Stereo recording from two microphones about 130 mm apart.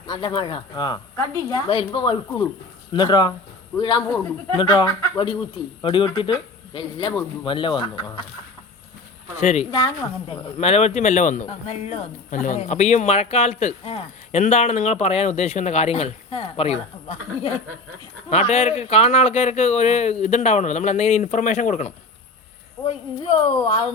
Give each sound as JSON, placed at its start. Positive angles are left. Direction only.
{"t": 0.1, "sound": "speech", "side_deg": 40}
{"t": 9.4, "sound": "speech", "side_deg": 55}
{"t": 9.7, "sound": "speech", "side_deg": 40}
{"t": 22.9, "sound": "speech", "side_deg": 45}